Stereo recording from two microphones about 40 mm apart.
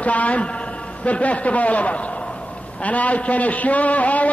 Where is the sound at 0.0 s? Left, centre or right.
Left.